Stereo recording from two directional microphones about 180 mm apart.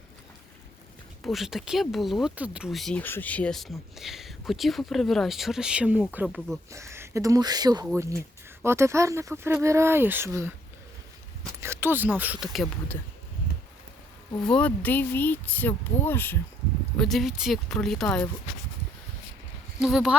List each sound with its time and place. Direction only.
1.2 s speech: centre (ahead or behind)
6.2 s speech: centre (ahead or behind)
6.7 s speech: 15° right (ahead or behind)
11.6 s speech: 15° right (ahead or behind)
14.4 s speech: 5° left (ahead or behind)
17.0 s speech: centre (ahead or behind)
19.8 s speech: centre (ahead or behind)